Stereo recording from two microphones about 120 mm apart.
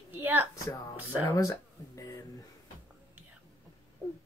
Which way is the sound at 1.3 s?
25° left (ahead or behind).